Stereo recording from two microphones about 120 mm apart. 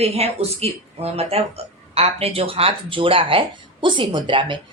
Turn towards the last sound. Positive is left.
turn(degrees=-40)  # may be behind; listen again after turning